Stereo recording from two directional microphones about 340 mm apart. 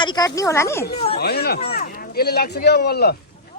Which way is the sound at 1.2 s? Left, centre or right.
Left.